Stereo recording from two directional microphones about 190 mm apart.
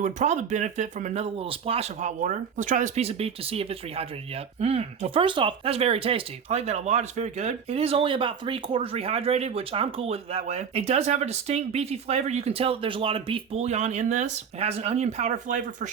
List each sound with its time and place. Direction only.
0.0 s speech: 40° right (ahead or behind)